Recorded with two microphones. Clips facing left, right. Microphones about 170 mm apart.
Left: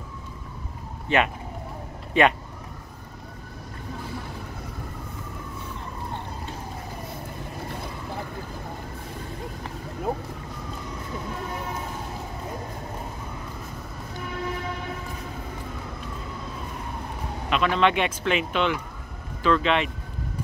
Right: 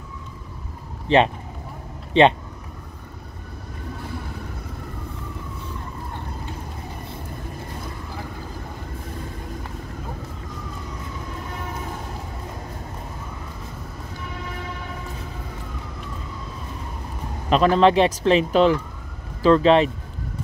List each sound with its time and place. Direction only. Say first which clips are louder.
1.0 s speech: right 6 dB; 30° right (ahead or behind)
17.5 s speech: right 6 dB; 35° right (ahead or behind)